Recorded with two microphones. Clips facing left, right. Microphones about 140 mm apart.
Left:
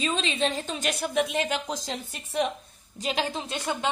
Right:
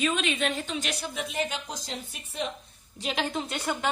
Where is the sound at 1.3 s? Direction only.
90° left.